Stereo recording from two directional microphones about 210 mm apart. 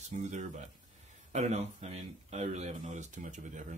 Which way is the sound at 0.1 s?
35° right (ahead or behind).